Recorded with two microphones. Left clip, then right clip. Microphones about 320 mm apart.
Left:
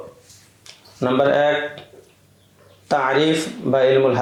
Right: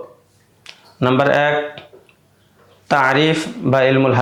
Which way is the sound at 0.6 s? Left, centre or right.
Right.